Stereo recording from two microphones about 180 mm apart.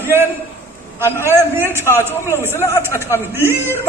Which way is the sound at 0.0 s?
10° right (ahead or behind).